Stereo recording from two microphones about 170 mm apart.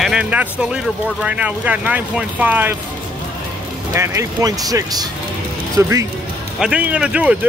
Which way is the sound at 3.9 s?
20° right (ahead or behind).